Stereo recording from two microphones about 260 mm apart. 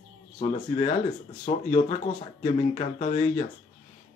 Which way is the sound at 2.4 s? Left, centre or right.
Left.